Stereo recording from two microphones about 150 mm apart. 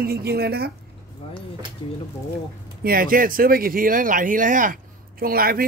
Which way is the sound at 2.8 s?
75° right (ahead or behind).